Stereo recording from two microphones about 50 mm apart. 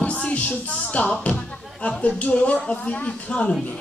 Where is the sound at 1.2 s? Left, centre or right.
Left.